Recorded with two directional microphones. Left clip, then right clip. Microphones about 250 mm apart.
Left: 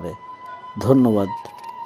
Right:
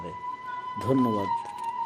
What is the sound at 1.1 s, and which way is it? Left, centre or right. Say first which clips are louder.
Speech: left 5 dB; left.